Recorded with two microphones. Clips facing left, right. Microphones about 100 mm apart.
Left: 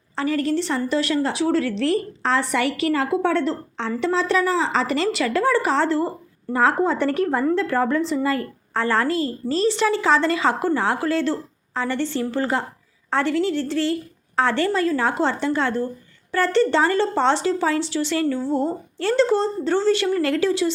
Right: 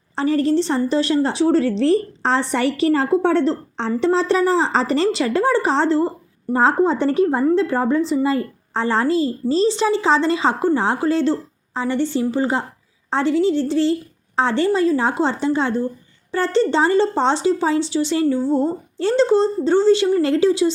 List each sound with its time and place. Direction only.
0.2 s a woman's voice: 30° right (ahead or behind)